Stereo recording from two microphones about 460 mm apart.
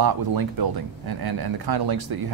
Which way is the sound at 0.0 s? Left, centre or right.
Right.